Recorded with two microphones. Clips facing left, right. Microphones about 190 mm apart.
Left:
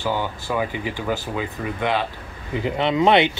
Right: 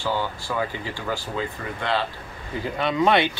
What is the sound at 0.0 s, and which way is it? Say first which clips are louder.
Speech: left 2 dB; 15° left (ahead or behind).